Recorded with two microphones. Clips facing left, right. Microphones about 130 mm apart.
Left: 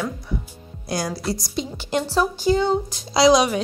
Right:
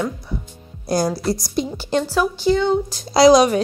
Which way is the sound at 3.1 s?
40° right (ahead or behind).